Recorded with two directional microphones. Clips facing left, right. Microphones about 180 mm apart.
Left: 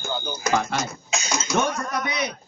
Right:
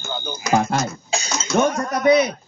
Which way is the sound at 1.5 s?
40° right (ahead or behind).